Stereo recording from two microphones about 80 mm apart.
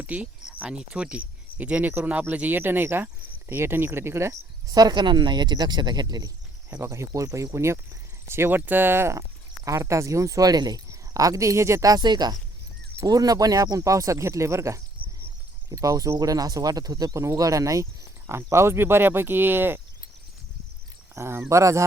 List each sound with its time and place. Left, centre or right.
0.0 s speech: centre; by 4.4 s right
4.7 s speech: right
6.8 s speech: right
13.1 s speech: right
21.2 s speech: right